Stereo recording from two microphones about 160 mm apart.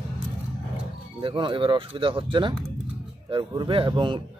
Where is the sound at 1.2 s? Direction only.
30° right (ahead or behind).